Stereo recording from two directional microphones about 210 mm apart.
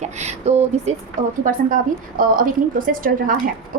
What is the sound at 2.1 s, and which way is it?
A woman's voice, 40° right (ahead or behind).